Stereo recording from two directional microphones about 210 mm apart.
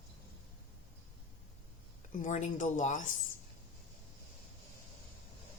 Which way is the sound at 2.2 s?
35° left (ahead or behind).